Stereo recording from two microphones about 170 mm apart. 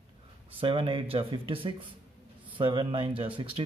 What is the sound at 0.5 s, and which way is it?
Speech, 30° right (ahead or behind).